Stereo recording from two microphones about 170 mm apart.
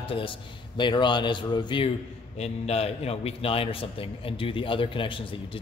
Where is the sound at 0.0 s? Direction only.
30° left (ahead or behind).